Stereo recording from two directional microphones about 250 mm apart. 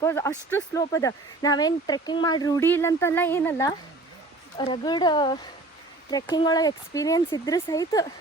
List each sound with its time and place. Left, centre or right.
0.0 s speech: centre